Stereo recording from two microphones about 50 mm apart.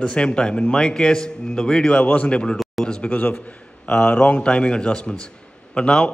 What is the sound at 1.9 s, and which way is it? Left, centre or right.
A man's voice, left.